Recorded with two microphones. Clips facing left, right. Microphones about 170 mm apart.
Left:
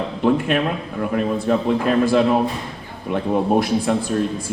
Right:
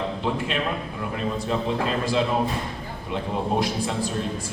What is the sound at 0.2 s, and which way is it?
A man's voice, 55° left (ahead or behind).